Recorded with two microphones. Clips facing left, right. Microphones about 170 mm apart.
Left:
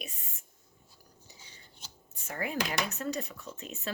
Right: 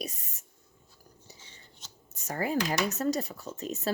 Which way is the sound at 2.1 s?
40° right (ahead or behind).